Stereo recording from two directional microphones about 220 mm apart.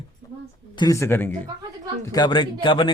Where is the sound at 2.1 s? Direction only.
20° left (ahead or behind).